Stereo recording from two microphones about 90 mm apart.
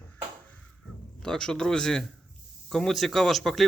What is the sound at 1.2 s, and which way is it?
A man's voice, 5° left (ahead or behind).